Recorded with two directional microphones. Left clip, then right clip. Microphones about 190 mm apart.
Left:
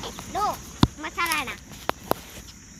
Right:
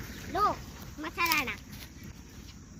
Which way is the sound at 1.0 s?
30° right (ahead or behind).